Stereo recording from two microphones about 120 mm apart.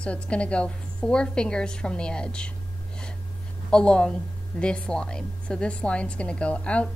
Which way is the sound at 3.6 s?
5° left (ahead or behind).